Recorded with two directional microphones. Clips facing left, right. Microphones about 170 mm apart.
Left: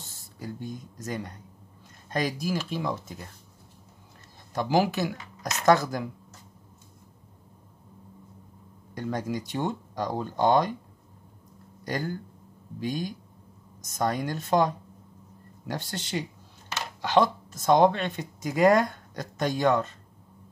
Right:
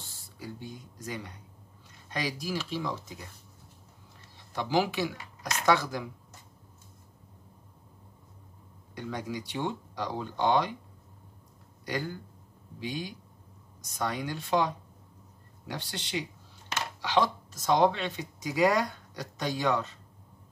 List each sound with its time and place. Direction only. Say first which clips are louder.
0.1 s speech: left 4 dB; 45° left (ahead or behind)
4.6 s speech: left 3 dB; 45° left (ahead or behind)
8.9 s speech: left 5 dB; 45° left (ahead or behind)
11.8 s speech: left 3 dB; 45° left (ahead or behind)